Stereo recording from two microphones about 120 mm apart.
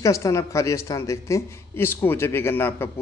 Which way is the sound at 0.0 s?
25° left (ahead or behind).